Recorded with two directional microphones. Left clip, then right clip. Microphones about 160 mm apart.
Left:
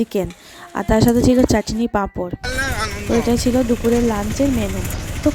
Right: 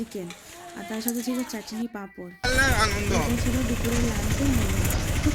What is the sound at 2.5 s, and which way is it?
Speech, centre (ahead or behind).